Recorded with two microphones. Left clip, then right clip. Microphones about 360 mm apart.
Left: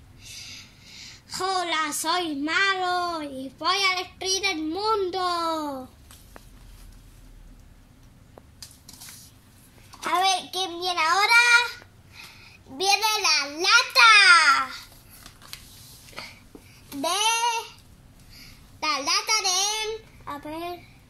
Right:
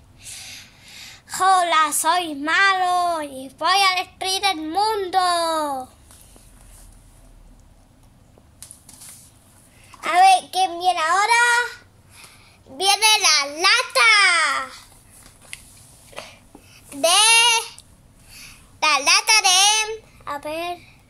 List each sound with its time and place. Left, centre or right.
0.2 s a woman's voice: right
10.0 s child singing: right
12.7 s a sound: right
17.0 s child singing: right
20.3 s a woman's voice: right